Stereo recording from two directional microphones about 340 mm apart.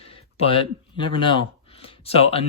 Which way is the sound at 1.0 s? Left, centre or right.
Centre.